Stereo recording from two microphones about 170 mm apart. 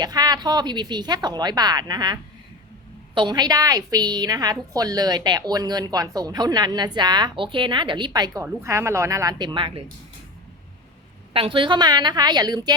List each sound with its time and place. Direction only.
0.0 s speech: 25° right (ahead or behind)
3.2 s speech: 25° right (ahead or behind)
11.3 s speech: 30° right (ahead or behind)